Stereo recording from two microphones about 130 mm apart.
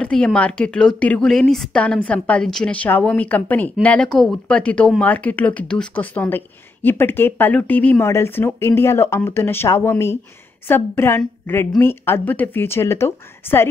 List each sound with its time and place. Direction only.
0.0 s speech: 5° left (ahead or behind)